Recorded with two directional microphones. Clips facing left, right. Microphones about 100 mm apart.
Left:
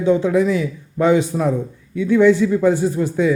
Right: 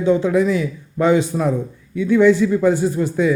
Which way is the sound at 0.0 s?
20° left (ahead or behind).